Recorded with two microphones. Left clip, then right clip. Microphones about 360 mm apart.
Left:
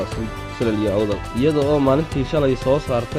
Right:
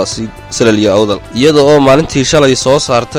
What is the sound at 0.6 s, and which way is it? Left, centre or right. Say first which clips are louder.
Speech: right 12 dB; right.